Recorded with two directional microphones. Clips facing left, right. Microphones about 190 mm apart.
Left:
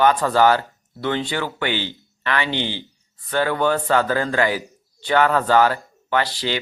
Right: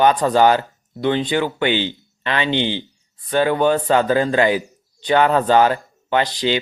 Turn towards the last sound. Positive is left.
turn(degrees=-20)  # may be behind; listen again after turning